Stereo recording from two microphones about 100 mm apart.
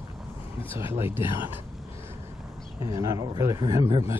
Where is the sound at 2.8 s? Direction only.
30° right (ahead or behind).